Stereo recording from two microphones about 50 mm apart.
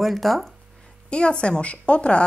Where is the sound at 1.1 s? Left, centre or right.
Centre.